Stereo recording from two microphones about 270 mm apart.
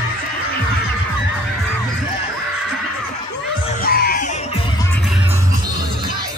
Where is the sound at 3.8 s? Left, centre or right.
Left.